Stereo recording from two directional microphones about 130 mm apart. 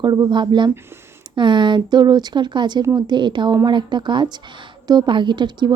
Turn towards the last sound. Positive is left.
turn(degrees=-35)  # may be behind; listen again after turning